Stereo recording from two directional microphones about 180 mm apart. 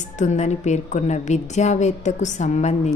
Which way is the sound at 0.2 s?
40° left (ahead or behind).